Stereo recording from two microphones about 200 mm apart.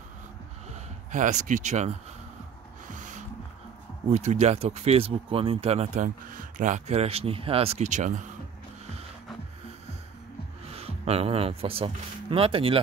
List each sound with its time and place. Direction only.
0.7 s speech: 40° right (ahead or behind)
2.9 s music: 40° right (ahead or behind)
4.1 s speech: 35° right (ahead or behind)
10.7 s speech: 30° right (ahead or behind)